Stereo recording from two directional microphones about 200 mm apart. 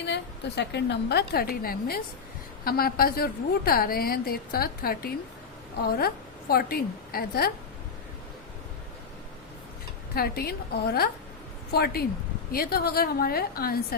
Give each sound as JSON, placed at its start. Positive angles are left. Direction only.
{"t": 0.0, "sound": "a woman's voice", "side_deg": 60}
{"t": 6.5, "sound": "a woman's voice", "side_deg": 50}
{"t": 10.2, "sound": "a woman's voice", "side_deg": 50}